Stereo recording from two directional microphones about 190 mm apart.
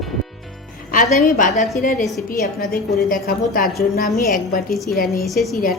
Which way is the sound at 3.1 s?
45° left (ahead or behind).